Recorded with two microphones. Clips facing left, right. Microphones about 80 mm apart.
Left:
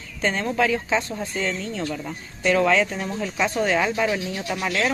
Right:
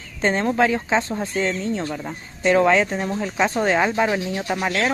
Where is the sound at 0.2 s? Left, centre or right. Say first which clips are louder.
Right 3 dB; right.